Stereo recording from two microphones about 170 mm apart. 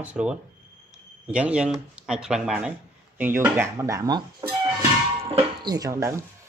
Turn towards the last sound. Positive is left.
turn(degrees=-15)  # may be behind; listen again after turning